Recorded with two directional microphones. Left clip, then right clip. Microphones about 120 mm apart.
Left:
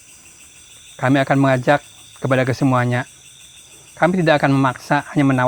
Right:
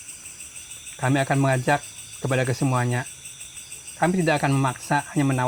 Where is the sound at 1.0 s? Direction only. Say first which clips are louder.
Left 7 dB; 90° left.